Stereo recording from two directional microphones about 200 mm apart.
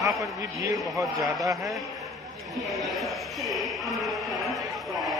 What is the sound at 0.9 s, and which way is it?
Speech, 15° right (ahead or behind).